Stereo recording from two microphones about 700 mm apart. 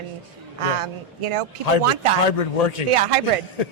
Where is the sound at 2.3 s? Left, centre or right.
Left.